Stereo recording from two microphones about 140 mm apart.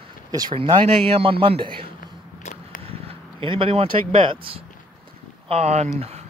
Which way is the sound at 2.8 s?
40° right (ahead or behind).